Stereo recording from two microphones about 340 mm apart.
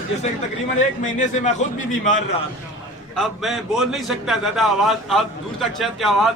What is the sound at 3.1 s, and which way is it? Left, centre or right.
A man's voice, centre.